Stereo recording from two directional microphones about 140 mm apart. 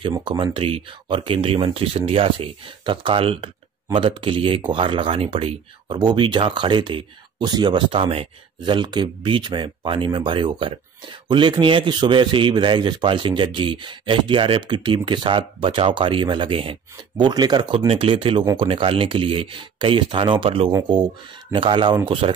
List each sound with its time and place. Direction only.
0.2 s speech: 35° right (ahead or behind)